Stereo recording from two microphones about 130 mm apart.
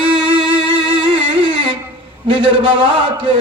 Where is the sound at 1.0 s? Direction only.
40° right (ahead or behind).